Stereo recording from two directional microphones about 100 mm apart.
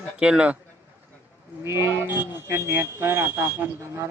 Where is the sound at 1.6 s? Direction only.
25° right (ahead or behind).